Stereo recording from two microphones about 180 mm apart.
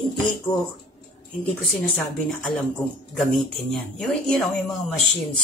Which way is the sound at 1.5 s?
5° left (ahead or behind).